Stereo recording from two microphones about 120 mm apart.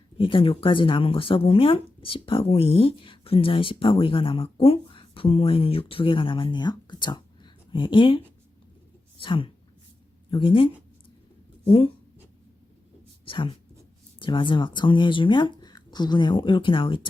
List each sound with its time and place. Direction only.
0.2 s speech: 50° left (ahead or behind)
9.2 s speech: 45° left (ahead or behind)
13.2 s speech: 45° left (ahead or behind)